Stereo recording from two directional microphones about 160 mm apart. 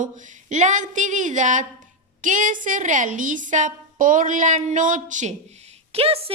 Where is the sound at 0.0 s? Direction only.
50° right (ahead or behind).